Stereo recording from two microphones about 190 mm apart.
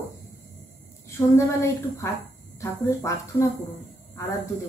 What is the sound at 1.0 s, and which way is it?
A woman's voice, 15° left (ahead or behind).